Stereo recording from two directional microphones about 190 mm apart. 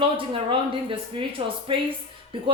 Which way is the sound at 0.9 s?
25° right (ahead or behind).